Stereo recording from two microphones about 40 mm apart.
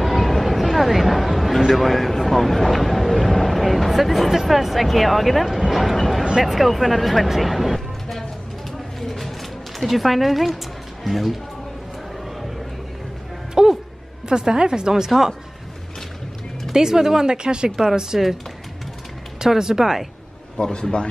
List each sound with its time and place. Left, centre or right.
0.0 s a sound: centre
1.7 s speech: centre
9.0 s a sound: centre
9.8 s speech: centre
13.6 s music: centre
14.3 s speech: centre
16.7 s speech: centre
18.1 s speech: centre
19.4 s speech: centre
20.5 s a man's voice: centre